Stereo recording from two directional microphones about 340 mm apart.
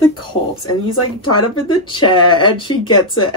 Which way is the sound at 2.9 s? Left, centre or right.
Left.